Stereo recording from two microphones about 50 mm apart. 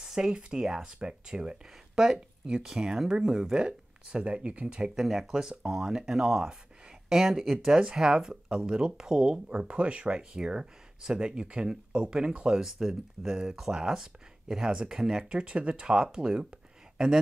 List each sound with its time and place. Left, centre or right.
0.0 s speech: centre